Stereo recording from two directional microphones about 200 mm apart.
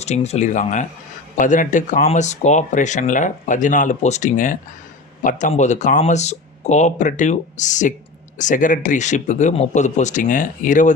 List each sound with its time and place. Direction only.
0.0 s speech: 35° left (ahead or behind)